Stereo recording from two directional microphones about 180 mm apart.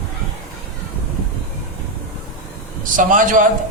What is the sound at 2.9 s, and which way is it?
Speech, 45° right (ahead or behind).